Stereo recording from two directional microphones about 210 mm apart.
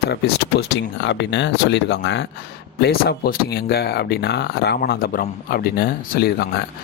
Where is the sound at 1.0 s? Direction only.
55° left (ahead or behind).